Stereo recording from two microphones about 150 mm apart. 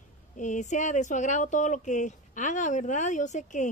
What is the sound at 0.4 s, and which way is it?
Speech, 55° left (ahead or behind).